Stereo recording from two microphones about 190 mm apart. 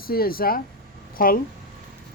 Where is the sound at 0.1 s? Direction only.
50° left (ahead or behind).